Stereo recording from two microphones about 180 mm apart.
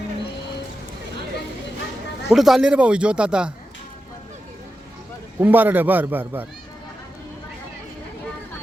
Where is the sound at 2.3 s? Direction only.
Centre (ahead or behind).